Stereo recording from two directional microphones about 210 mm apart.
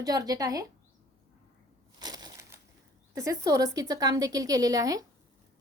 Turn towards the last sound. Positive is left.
turn(degrees=-15)  # may be behind; listen again after turning